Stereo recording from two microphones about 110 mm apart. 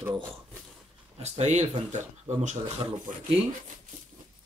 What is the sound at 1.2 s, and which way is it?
Speech, 90° right.